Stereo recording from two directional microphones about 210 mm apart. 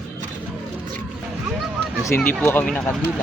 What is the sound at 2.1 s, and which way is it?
Speech, 10° left (ahead or behind).